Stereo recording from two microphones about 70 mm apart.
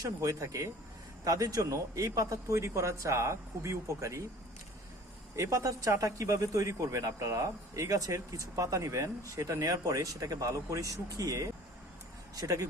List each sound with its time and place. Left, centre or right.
0.0 s speech: right
5.4 s speech: right